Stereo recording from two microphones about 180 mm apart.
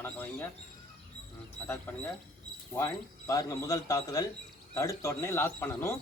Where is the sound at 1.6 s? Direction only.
10° left (ahead or behind).